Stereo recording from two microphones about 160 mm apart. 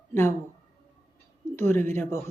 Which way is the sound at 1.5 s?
15° left (ahead or behind).